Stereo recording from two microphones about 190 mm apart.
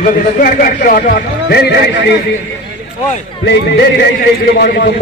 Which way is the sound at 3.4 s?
60° left (ahead or behind).